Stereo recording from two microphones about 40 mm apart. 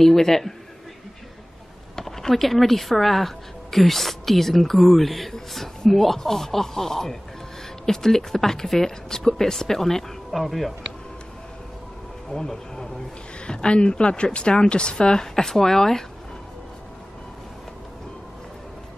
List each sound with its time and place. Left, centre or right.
0.0 s speech: centre
2.0 s speech: centre
12.3 s speech: centre
13.5 s a woman's voice: left